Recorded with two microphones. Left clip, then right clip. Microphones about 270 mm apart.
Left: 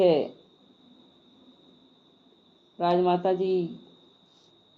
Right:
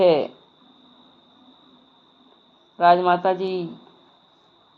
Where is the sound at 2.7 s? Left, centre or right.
Centre.